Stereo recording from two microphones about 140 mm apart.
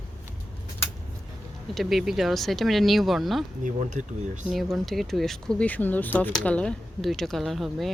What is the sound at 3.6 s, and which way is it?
Speech, 60° right (ahead or behind).